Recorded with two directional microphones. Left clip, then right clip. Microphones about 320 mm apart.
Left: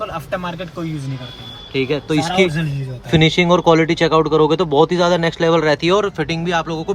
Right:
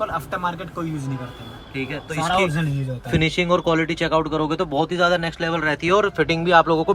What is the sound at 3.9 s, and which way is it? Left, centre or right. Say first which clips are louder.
Speech: left 7 dB; centre.